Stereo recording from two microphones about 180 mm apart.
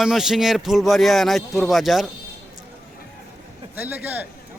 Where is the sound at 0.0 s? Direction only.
Centre (ahead or behind).